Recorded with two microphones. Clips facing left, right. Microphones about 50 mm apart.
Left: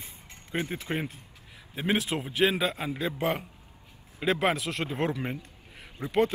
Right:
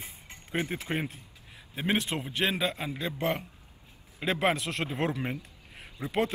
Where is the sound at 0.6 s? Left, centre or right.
Right.